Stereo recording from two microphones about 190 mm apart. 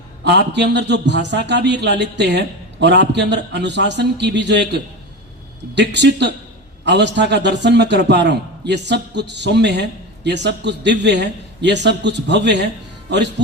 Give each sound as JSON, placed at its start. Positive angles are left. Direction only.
{"t": 0.3, "sound": "a man's voice", "side_deg": -65}